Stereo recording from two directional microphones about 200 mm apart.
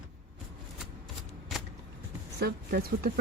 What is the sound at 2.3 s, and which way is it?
Speech, 50° right (ahead or behind).